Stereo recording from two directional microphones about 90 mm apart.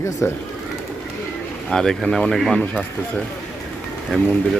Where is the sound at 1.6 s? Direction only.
5° left (ahead or behind).